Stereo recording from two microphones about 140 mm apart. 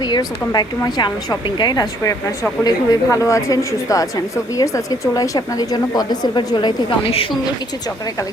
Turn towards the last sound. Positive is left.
turn(degrees=40)  # may be behind; listen again after turning